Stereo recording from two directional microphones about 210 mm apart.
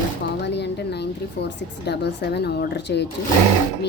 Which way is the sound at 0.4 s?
55° left (ahead or behind).